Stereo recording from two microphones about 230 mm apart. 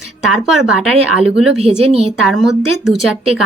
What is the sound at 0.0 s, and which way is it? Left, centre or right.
Speech, centre.